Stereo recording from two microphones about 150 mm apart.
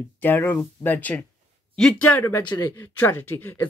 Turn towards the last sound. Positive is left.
turn(degrees=15)  # may be behind; listen again after turning